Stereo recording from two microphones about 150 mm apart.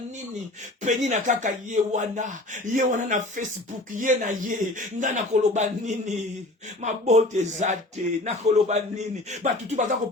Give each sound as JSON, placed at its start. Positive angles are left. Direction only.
{"t": 0.8, "sound": "speech", "side_deg": -50}